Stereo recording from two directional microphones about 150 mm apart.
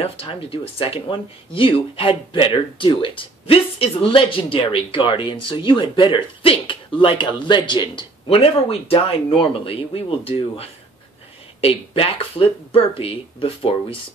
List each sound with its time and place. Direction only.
0.0 s speech: 40° left (ahead or behind)